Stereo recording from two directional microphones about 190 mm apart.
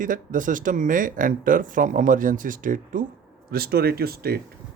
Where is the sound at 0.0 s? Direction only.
45° right (ahead or behind).